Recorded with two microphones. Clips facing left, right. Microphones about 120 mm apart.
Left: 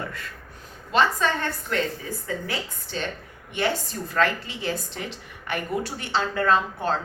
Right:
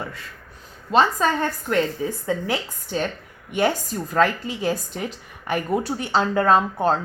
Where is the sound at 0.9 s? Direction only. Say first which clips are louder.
Right 3 dB; 40° right (ahead or behind).